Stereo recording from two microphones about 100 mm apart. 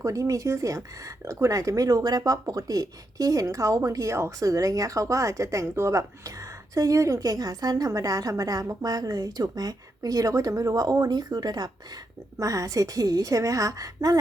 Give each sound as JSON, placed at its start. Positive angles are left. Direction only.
{"t": 0.0, "sound": "speech", "side_deg": -35}